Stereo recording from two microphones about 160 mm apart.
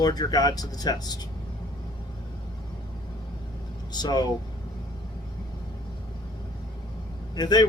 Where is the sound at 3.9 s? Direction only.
25° left (ahead or behind).